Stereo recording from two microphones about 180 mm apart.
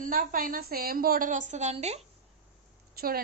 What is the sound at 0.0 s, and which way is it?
A woman's voice, 50° right (ahead or behind).